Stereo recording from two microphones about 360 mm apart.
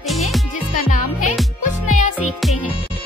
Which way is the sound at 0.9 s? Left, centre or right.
Left.